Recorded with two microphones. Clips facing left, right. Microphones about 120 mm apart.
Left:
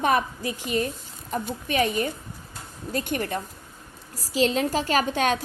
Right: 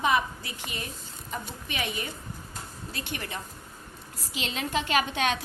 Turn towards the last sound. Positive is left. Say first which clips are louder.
# left 4 dB
turn(degrees=40)  # may be behind; listen again after turning